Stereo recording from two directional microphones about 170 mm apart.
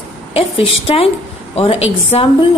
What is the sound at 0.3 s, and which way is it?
Speech, 35° left (ahead or behind).